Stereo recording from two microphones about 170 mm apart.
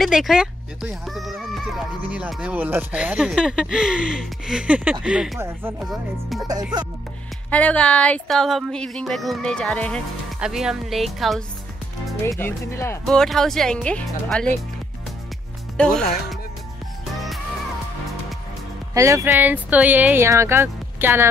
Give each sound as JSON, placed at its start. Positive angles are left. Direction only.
{"t": 0.0, "sound": "speech", "side_deg": 0}
{"t": 5.8, "sound": "speech", "side_deg": 0}
{"t": 7.5, "sound": "speech", "side_deg": 5}
{"t": 12.3, "sound": "speech", "side_deg": 15}
{"t": 13.0, "sound": "speech", "side_deg": 0}
{"t": 15.8, "sound": "speech", "side_deg": 5}
{"t": 18.9, "sound": "speech", "side_deg": -15}